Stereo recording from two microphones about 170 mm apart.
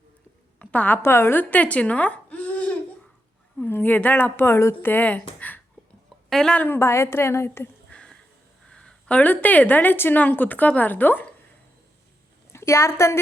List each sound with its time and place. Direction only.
0.6 s a woman's voice: 10° left (ahead or behind)
12.5 s a woman's voice: 15° left (ahead or behind)